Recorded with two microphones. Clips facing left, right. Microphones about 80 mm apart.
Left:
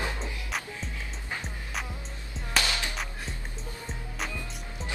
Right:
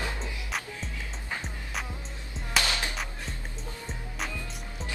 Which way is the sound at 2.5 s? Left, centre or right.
Right.